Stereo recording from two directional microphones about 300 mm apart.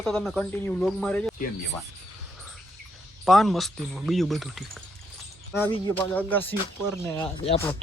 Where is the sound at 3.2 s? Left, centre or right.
Centre.